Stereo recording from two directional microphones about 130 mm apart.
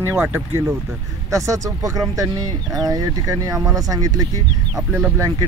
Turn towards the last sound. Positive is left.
turn(degrees=-15)  # may be behind; listen again after turning